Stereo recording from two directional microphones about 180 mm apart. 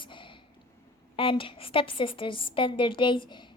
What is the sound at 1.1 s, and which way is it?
A woman's voice, 30° left (ahead or behind).